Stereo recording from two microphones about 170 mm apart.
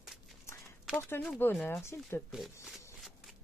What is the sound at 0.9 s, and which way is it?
Speech, 10° left (ahead or behind).